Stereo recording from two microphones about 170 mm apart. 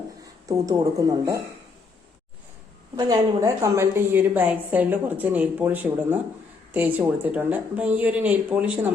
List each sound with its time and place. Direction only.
0.4 s speech: 20° right (ahead or behind)
2.9 s a woman's voice: 20° right (ahead or behind)